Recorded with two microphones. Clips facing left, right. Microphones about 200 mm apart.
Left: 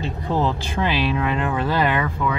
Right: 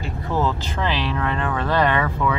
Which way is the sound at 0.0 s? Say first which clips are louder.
Left 1 dB; 20° left (ahead or behind).